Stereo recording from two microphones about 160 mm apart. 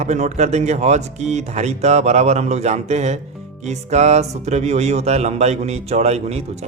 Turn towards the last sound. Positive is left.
turn(degrees=-40)  # may be behind; listen again after turning